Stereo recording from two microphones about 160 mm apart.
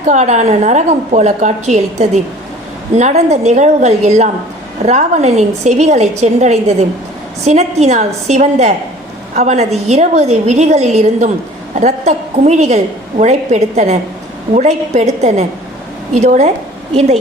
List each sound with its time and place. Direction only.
0.0 s a woman's voice: 50° right (ahead or behind)